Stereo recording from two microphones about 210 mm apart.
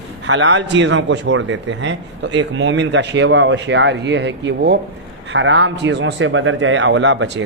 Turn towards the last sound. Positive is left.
turn(degrees=-60)  # may be behind; listen again after turning